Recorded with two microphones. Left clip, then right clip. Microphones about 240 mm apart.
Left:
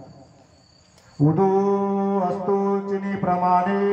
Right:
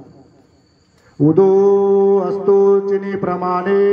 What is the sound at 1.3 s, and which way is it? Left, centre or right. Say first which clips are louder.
Mantra: right 9 dB; centre.